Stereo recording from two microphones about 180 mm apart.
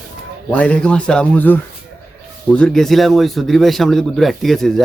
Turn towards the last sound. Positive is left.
turn(degrees=0)  # may be behind; listen again after turning